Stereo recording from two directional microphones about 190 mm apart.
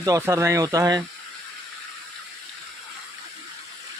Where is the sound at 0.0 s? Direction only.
15° right (ahead or behind).